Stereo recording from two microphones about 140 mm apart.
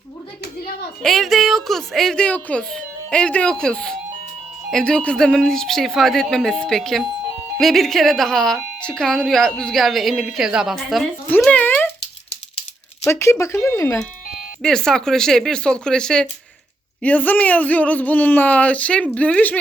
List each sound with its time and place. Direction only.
1.0 s speech: centre (ahead or behind)
11.3 s a sound: 10° left (ahead or behind)
13.1 s speech: 20° left (ahead or behind)
14.6 s speech: 5° left (ahead or behind)